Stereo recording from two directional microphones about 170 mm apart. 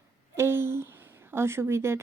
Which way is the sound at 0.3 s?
15° right (ahead or behind).